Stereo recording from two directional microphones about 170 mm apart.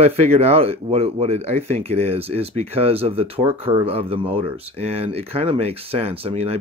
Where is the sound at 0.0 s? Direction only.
35° right (ahead or behind).